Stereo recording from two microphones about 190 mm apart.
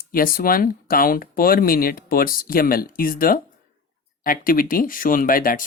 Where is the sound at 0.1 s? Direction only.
50° left (ahead or behind).